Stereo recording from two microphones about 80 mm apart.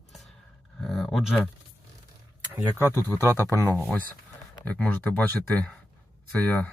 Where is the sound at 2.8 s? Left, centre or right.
Left.